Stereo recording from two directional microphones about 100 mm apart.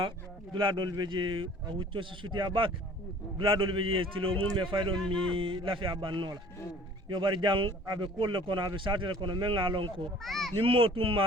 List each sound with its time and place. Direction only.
0.5 s a man's voice: 55° right (ahead or behind)
4.5 s a man's voice: 55° right (ahead or behind)
10.2 s a child's voice: centre (ahead or behind)
10.6 s a man's voice: 65° right (ahead or behind)